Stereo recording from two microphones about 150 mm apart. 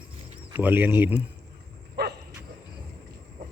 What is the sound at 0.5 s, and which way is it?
Speech, 10° right (ahead or behind).